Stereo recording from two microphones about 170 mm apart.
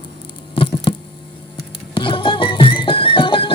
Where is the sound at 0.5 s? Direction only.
30° left (ahead or behind).